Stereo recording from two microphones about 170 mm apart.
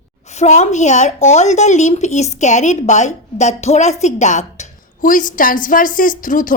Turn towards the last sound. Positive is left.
turn(degrees=50)  # may be behind; listen again after turning